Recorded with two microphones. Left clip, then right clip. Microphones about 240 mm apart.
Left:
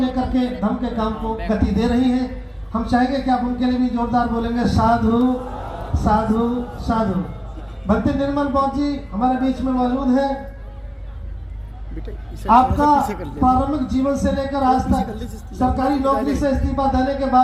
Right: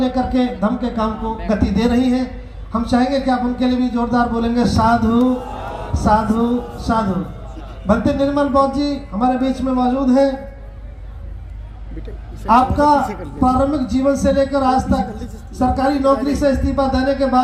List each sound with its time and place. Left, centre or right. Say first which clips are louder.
0.0 s a sound: right 3 dB; right
1.5 s speech: right 3 dB; right
12.5 s speech: right 1 dB; right
13.1 s a man's voice: even; centre
13.4 s speech: right 1 dB; right